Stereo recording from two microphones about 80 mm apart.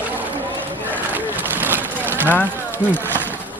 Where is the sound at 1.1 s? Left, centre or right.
Right.